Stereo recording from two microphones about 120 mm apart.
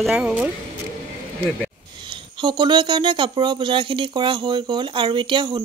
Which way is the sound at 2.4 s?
40° right (ahead or behind).